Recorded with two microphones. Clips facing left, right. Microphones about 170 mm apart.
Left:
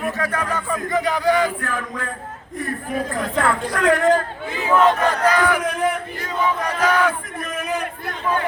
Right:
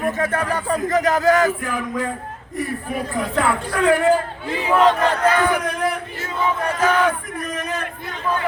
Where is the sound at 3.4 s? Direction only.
5° right (ahead or behind).